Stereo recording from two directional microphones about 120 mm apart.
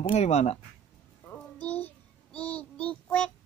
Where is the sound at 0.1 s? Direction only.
65° left (ahead or behind).